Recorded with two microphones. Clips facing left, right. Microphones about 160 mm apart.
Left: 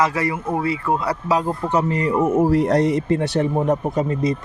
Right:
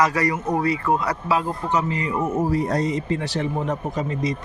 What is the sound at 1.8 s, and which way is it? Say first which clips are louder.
Speech: left 5 dB; 55° left (ahead or behind).